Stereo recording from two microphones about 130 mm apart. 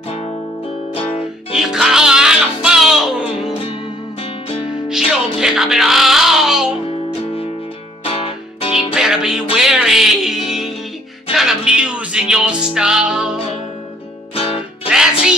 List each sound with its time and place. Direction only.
1.5 s music: 5° right (ahead or behind)
4.8 s music: 5° right (ahead or behind)
8.0 s music: 50° left (ahead or behind)
8.7 s music: 5° right (ahead or behind)
14.3 s music: 50° left (ahead or behind)
14.9 s music: 5° right (ahead or behind)